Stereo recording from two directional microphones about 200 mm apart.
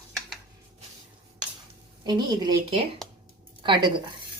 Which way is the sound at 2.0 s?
20° right (ahead or behind).